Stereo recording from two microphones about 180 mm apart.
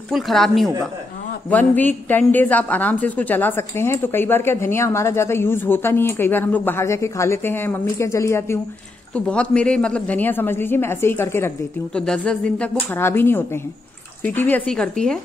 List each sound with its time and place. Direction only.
0.1 s a woman's voice: centre (ahead or behind)